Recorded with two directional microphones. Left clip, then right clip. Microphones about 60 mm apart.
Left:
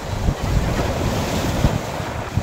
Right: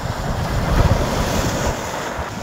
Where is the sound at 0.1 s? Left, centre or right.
Right.